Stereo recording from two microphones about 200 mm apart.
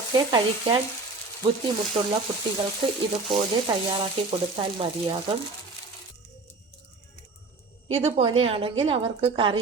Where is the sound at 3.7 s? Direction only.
20° right (ahead or behind).